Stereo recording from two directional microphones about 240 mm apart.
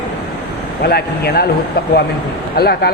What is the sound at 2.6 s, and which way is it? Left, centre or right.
Speech, left.